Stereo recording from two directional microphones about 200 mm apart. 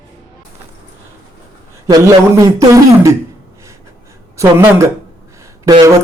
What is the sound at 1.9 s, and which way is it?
A man's voice, 15° right (ahead or behind).